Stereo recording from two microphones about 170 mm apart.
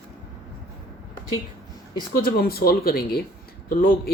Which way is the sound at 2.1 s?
65° left (ahead or behind).